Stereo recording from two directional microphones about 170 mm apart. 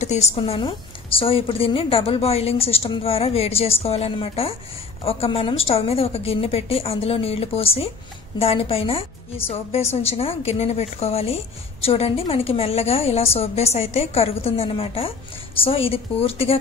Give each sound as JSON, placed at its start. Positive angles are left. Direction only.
{"t": 0.0, "sound": "a woman's voice", "side_deg": 40}